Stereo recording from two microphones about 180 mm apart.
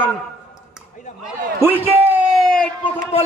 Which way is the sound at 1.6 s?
10° right (ahead or behind).